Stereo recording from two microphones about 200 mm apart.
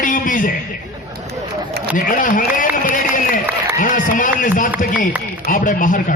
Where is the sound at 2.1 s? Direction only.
45° left (ahead or behind).